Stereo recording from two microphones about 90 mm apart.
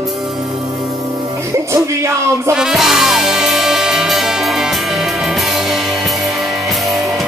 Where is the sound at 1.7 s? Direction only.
30° right (ahead or behind).